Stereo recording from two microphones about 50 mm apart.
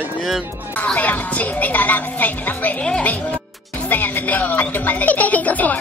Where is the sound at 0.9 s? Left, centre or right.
Left.